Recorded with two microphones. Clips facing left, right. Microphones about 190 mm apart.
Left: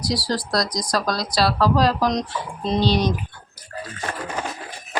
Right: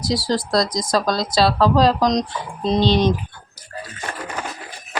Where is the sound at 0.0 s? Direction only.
25° right (ahead or behind).